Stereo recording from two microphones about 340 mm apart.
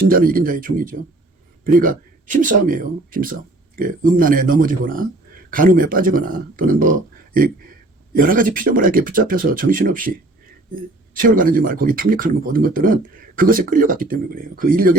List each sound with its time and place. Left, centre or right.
0.1 s speech: right
8.2 s speech: right